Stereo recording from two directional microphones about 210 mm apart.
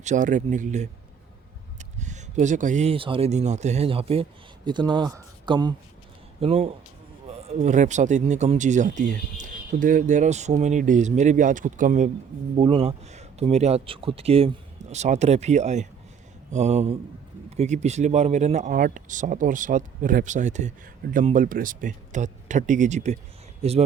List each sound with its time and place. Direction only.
0.0 s a man's voice: 35° right (ahead or behind)